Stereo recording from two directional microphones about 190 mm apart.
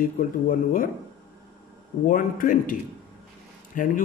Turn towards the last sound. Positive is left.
turn(degrees=45)  # may be behind; listen again after turning